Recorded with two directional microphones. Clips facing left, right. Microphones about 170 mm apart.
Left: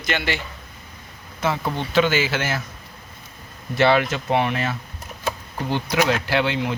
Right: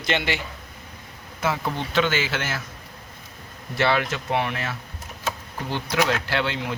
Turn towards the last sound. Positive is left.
turn(degrees=15)  # may be behind; listen again after turning